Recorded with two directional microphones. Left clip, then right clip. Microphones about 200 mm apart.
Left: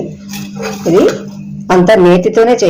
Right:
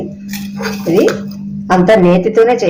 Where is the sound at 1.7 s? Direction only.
25° left (ahead or behind).